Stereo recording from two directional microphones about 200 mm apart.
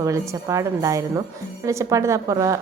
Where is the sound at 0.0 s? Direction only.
15° right (ahead or behind).